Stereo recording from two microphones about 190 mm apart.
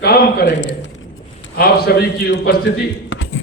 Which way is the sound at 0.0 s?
55° left (ahead or behind).